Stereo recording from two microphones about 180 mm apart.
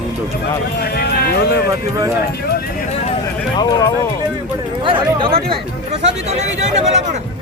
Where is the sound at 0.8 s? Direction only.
60° left (ahead or behind).